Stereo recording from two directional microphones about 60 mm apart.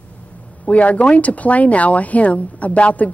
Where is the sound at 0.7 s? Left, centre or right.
Left.